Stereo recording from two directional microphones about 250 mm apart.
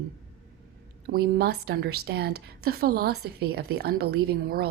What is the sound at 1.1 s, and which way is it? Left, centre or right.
A woman's voice, right.